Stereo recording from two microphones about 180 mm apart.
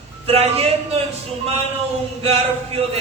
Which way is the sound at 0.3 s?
35° right (ahead or behind).